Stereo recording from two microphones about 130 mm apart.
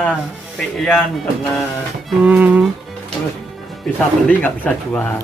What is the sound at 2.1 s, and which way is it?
Speech, 10° right (ahead or behind).